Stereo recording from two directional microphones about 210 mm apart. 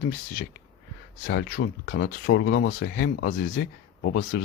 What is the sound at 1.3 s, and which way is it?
Speech, 50° left (ahead or behind).